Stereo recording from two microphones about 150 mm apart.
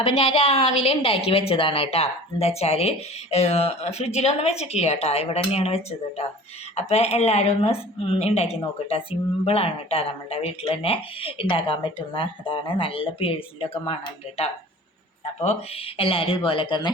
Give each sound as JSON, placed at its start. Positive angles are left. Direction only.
{"t": 0.1, "sound": "a woman's voice", "side_deg": 50}